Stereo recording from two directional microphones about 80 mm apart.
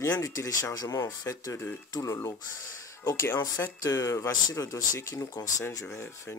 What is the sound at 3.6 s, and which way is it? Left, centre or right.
Speech, left.